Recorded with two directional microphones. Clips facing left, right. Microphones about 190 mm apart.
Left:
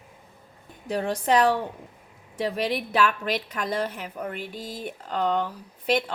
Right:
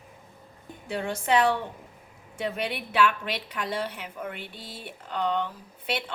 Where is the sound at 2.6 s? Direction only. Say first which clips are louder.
Left 1 dB; 40° left (ahead or behind).